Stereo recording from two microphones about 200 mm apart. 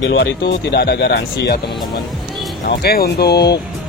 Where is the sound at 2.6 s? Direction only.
50° left (ahead or behind).